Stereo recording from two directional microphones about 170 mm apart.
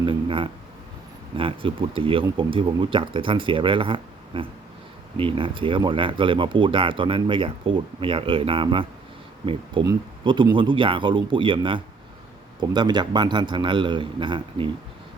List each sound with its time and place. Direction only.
0.0 s a man's voice: 30° right (ahead or behind)